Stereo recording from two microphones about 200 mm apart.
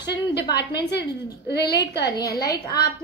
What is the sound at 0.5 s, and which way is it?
Speech, 55° left (ahead or behind).